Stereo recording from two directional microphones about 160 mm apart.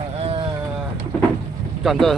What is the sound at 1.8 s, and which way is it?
Speech, centre (ahead or behind).